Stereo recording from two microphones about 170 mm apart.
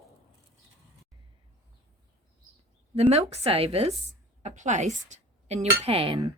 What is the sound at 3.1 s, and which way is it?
Speech, 40° right (ahead or behind).